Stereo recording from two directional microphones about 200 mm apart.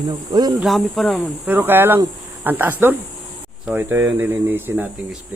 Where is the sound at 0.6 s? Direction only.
Centre (ahead or behind).